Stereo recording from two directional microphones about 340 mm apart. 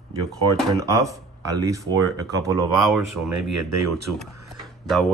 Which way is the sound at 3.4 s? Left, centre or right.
Right.